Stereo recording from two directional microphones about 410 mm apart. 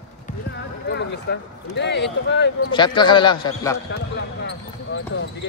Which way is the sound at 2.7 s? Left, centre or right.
Centre.